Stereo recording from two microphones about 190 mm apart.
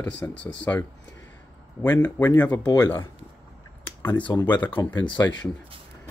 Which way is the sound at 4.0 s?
20° left (ahead or behind).